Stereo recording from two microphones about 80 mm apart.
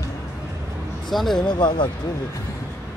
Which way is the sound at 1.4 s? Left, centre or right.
Left.